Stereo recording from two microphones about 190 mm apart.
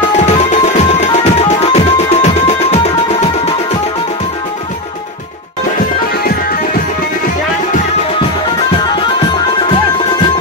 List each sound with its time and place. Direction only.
0.3 s music: 35° left (ahead or behind)
2.2 s music: 35° left (ahead or behind)